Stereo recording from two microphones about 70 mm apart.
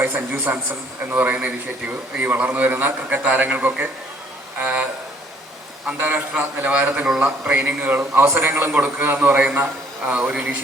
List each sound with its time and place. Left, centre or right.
0.3 s a man's voice: right